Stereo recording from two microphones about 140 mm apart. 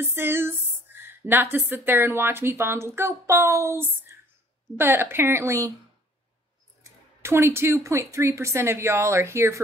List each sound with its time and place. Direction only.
0.0 s speech: 15° right (ahead or behind)
6.8 s speech: 20° right (ahead or behind)